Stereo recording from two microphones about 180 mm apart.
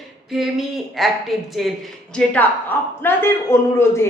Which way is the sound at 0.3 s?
Centre (ahead or behind).